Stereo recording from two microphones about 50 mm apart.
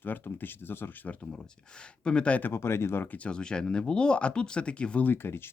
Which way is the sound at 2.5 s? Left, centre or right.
Left.